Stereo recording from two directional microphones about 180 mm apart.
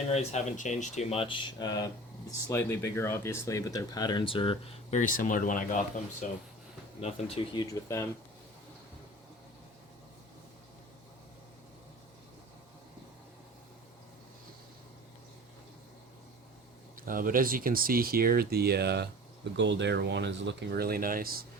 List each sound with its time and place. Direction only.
0.1 s speech: 35° left (ahead or behind)
7.0 s speech: 30° left (ahead or behind)
17.1 s speech: 50° right (ahead or behind)
19.5 s speech: 80° right; by 21.4 s 55° right (ahead or behind)